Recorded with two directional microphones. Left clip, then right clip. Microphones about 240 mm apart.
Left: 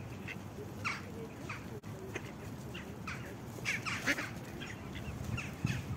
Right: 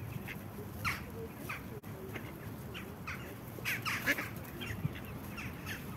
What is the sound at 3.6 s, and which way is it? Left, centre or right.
Duck, right.